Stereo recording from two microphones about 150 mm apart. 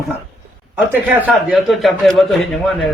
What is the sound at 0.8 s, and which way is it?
A man's voice, 10° right (ahead or behind).